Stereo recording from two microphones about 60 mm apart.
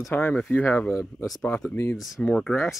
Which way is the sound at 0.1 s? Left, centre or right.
Left.